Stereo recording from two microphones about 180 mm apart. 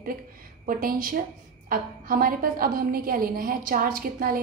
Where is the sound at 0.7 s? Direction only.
50° right (ahead or behind).